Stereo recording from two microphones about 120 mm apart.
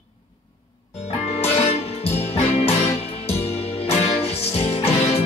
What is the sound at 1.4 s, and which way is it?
Music, 60° left (ahead or behind).